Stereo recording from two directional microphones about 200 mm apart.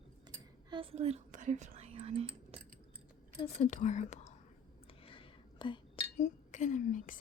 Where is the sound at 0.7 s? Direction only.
25° right (ahead or behind).